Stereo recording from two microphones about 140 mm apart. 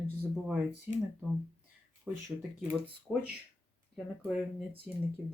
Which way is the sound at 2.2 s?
15° right (ahead or behind).